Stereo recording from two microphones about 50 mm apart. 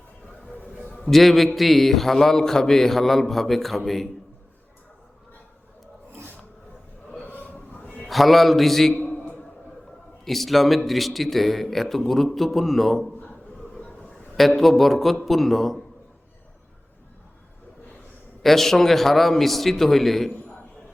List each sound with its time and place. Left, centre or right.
0.9 s a man's voice: centre
7.3 s train: left
8.0 s a man's voice: centre
9.0 s a sound: left
10.2 s speech: centre
14.3 s speech: centre
18.4 s speech: centre